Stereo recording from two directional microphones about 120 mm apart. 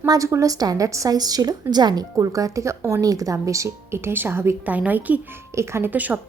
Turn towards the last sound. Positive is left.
turn(degrees=-15)  # may be behind; listen again after turning